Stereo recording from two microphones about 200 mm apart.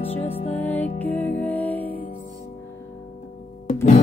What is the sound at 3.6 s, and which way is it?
Music, 35° left (ahead or behind).